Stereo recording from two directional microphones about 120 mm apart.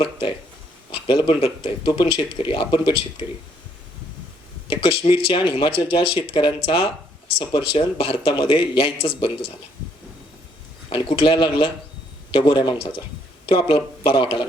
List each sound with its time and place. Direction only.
0.0 s speech: 45° left (ahead or behind)
4.7 s speech: 50° left (ahead or behind)
10.8 s speech: 45° left (ahead or behind)